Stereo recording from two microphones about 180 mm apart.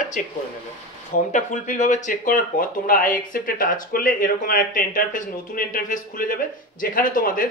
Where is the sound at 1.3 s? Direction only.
40° left (ahead or behind).